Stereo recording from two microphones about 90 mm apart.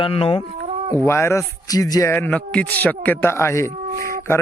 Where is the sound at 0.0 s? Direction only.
90° left.